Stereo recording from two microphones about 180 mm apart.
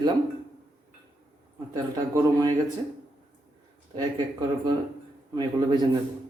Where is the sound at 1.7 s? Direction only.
20° right (ahead or behind).